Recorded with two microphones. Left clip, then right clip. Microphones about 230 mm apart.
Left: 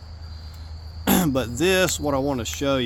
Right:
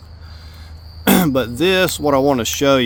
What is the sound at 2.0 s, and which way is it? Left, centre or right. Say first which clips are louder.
Speech: right 9 dB; right.